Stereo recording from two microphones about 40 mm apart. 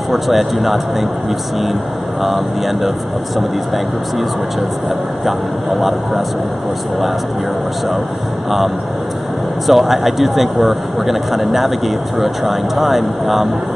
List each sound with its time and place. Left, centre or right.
0.1 s speech: centre
2.2 s speech: centre
5.8 s speech: centre
8.5 s speech: centre